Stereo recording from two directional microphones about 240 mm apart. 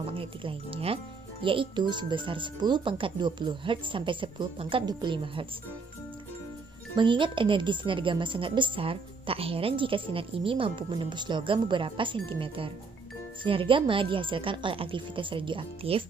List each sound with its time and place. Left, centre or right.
0.1 s speech: right
6.9 s speech: centre